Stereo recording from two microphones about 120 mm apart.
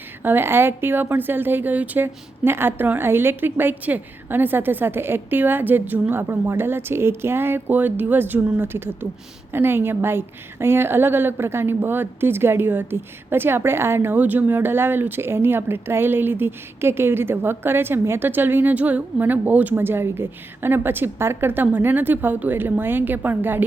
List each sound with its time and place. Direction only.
0.2 s a woman's voice: 15° right (ahead or behind)